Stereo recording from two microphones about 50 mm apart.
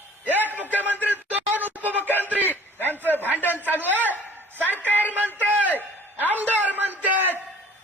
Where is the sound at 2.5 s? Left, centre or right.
Left.